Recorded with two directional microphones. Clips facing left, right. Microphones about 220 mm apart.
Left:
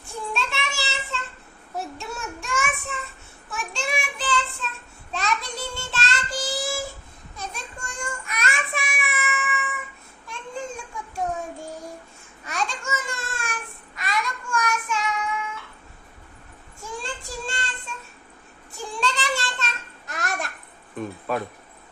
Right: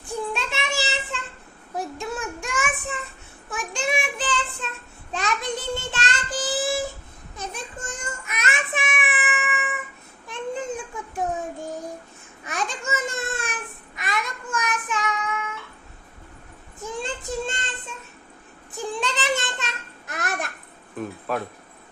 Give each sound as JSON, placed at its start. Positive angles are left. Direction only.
{"t": 0.0, "sound": "child singing", "side_deg": -15}
{"t": 9.0, "sound": "cat", "side_deg": -15}
{"t": 10.2, "sound": "a sound", "side_deg": -20}
{"t": 12.5, "sound": "babbling", "side_deg": -20}
{"t": 16.8, "sound": "child singing", "side_deg": -20}
{"t": 20.1, "sound": "babbling", "side_deg": -20}
{"t": 21.0, "sound": "a sound", "side_deg": 0}